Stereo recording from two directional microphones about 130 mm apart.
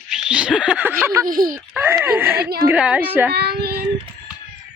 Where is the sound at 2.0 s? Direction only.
15° right (ahead or behind).